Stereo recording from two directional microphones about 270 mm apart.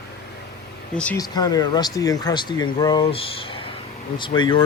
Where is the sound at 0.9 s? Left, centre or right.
Centre.